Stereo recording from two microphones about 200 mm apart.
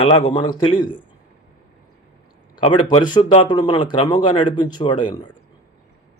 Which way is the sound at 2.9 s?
20° left (ahead or behind).